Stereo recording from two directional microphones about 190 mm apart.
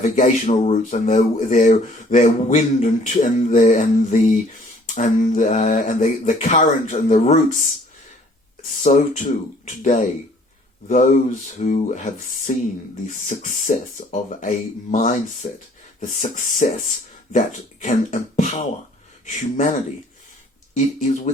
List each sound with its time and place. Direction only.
0.0 s speech: 40° left (ahead or behind)
8.8 s speech: 40° left (ahead or behind)
20.7 s speech: 40° left (ahead or behind)